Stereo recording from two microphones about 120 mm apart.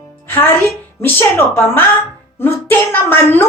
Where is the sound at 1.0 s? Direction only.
15° left (ahead or behind).